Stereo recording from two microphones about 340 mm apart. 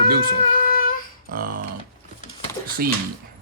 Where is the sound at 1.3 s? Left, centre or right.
Right.